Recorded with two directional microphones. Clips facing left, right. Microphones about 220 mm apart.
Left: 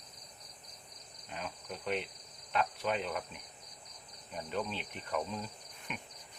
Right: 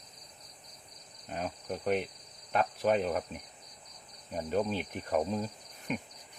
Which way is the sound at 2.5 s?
45° right (ahead or behind).